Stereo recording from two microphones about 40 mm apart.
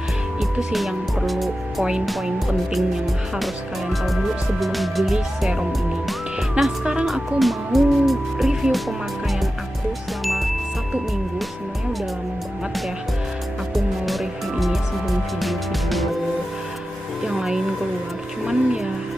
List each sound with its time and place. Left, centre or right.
0.7 s speech: centre
3.9 s speech: centre
6.6 s music: right
7.1 s speech: centre
10.2 s music: centre
13.7 s music: centre
17.2 s speech: centre